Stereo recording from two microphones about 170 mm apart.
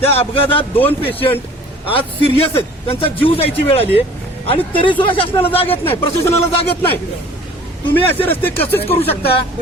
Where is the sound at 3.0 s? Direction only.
35° left (ahead or behind).